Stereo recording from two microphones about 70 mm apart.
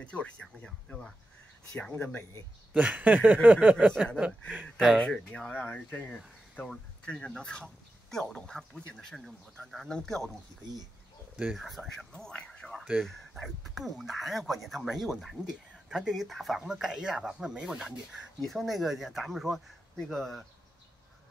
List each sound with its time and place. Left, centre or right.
0.0 s speech: centre
0.8 s speech: centre
1.8 s speech: left
2.7 s speech: centre
4.7 s speech: centre
5.5 s speech: left
6.1 s speech: centre
11.5 s speech: centre
12.1 s speech: centre
13.3 s speech: centre